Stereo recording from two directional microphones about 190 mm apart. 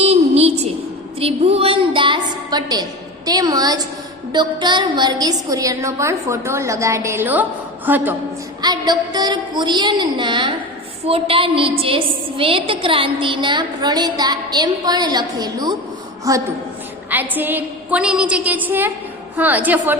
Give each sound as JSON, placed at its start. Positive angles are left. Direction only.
{"t": 0.0, "sound": "a sound", "side_deg": -35}
{"t": 3.2, "sound": "a woman's voice", "side_deg": -20}
{"t": 8.6, "sound": "a woman's voice", "side_deg": -20}